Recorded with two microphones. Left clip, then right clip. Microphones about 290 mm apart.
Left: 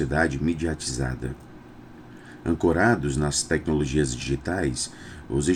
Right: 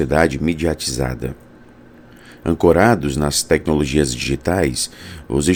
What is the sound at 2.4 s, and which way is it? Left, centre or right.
Speech, right.